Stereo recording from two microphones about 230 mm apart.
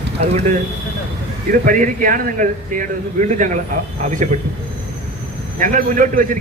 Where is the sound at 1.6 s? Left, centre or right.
Right.